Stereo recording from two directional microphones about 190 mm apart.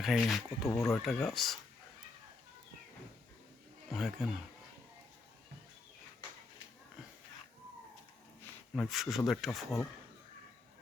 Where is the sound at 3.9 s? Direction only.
Centre (ahead or behind).